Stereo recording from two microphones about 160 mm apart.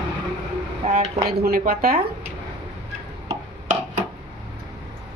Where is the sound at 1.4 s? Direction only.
65° right (ahead or behind).